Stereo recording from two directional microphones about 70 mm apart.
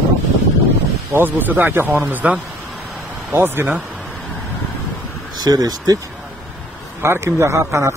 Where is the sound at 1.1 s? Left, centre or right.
Right.